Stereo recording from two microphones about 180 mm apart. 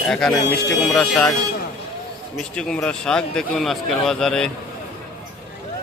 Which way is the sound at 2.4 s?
5° left (ahead or behind).